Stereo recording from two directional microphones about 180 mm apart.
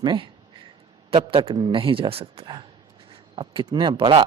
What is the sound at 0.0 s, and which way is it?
A man's voice, 25° right (ahead or behind).